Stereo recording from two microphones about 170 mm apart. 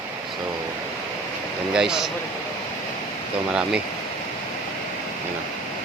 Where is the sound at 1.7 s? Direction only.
5° right (ahead or behind).